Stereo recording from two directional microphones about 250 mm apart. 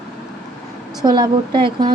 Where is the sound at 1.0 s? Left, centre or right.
Centre.